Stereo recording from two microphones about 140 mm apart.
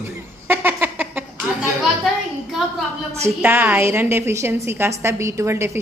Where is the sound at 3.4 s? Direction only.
15° right (ahead or behind).